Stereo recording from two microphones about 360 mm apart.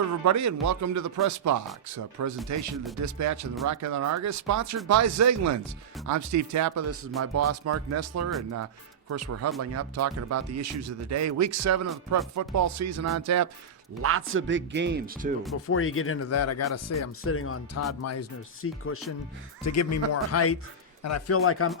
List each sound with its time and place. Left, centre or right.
0.3 s speech: right
14.0 s speech: right
15.5 s speech: left